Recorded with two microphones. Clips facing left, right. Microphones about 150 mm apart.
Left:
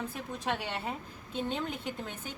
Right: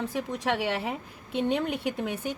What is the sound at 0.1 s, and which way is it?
A woman's voice, 85° right.